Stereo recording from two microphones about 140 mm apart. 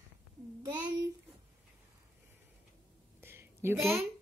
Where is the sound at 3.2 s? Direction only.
15° right (ahead or behind).